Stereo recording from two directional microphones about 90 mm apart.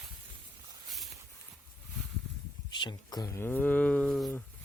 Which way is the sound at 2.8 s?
50° left (ahead or behind).